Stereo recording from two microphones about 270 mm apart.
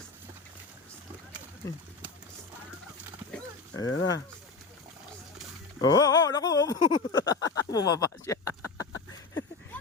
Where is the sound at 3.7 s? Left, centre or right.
Left.